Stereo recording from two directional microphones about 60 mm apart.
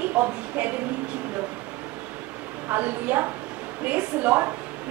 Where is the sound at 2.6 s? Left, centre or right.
Right.